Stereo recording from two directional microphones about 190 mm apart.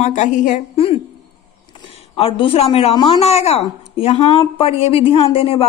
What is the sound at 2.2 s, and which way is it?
Speech, 30° left (ahead or behind).